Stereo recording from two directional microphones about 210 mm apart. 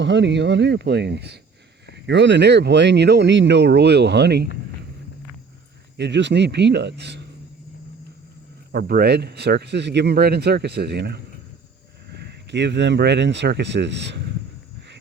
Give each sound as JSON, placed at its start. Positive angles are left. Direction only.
{"t": 0.0, "sound": "speech", "side_deg": -55}
{"t": 6.0, "sound": "speech", "side_deg": -55}
{"t": 8.7, "sound": "speech", "side_deg": -50}